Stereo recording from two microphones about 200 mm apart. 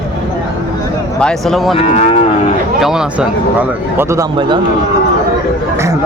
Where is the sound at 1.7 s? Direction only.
30° left (ahead or behind).